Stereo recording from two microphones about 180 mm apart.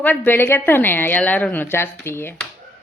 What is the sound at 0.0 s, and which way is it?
Speech, 10° left (ahead or behind).